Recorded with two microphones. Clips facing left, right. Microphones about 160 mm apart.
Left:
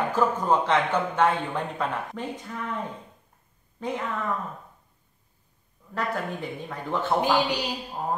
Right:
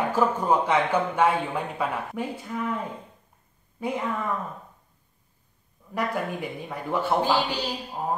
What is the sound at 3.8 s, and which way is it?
Speech, 10° right (ahead or behind).